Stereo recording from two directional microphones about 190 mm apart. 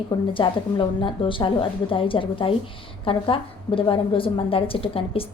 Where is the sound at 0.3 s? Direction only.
25° left (ahead or behind).